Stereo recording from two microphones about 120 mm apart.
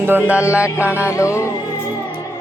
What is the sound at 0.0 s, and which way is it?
Music, 15° right (ahead or behind).